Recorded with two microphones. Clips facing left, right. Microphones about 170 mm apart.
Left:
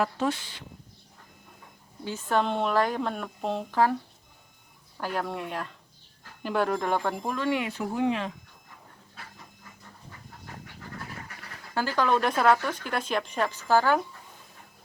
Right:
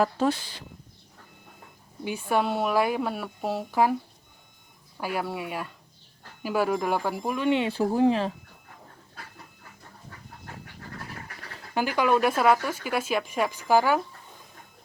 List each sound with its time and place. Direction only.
0.0 s speech: 35° right (ahead or behind)
2.0 s speech: 10° right (ahead or behind)
4.9 s speech: 10° right (ahead or behind)
7.3 s speech: 20° right (ahead or behind)
11.7 s speech: 15° right (ahead or behind)